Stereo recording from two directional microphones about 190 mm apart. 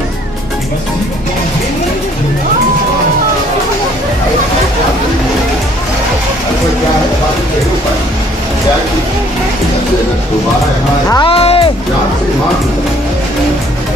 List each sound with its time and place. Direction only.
11.1 s music: 25° left (ahead or behind)